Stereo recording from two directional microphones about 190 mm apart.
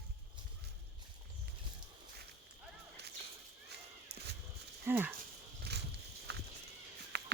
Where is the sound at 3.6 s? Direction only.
60° right (ahead or behind).